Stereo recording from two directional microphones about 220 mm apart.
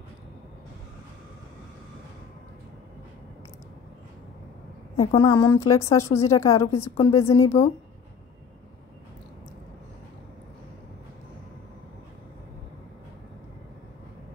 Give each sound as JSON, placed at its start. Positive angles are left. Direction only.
{"t": 5.1, "sound": "speech", "side_deg": 20}